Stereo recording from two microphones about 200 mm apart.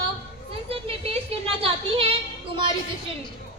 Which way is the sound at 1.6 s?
30° right (ahead or behind).